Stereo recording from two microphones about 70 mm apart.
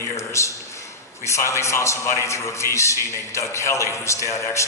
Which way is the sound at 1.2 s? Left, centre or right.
Left.